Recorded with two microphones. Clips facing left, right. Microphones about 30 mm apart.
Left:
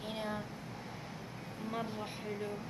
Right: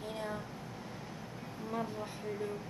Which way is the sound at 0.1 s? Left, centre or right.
Left.